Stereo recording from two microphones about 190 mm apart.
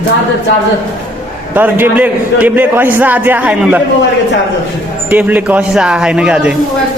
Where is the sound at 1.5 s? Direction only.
10° right (ahead or behind).